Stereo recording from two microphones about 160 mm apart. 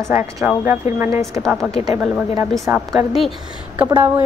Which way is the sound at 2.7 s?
10° right (ahead or behind).